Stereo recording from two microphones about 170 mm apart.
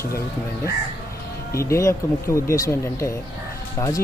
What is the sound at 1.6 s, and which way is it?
Speech, 15° left (ahead or behind).